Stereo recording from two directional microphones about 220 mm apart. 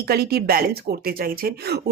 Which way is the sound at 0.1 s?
45° right (ahead or behind).